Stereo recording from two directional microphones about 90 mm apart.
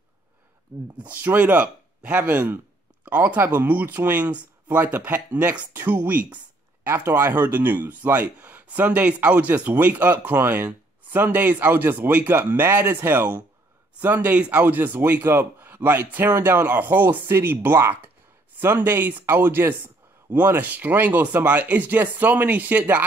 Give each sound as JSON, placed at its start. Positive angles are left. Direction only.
{"t": 0.9, "sound": "speech", "side_deg": -15}
{"t": 6.9, "sound": "speech", "side_deg": -30}